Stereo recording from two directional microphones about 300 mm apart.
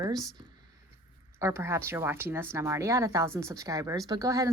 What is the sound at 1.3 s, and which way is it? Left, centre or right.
Speech, centre.